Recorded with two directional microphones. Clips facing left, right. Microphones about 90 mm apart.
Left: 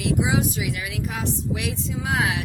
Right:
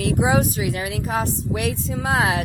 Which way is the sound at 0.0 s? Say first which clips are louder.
Right 3 dB; 45° right (ahead or behind).